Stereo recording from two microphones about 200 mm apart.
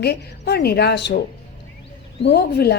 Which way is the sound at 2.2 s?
55° left (ahead or behind).